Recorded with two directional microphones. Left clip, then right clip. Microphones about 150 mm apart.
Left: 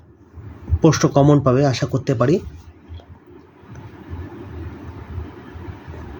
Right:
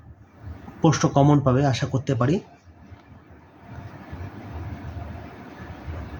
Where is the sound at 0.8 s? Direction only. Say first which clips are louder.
Left 5 dB; 30° left (ahead or behind).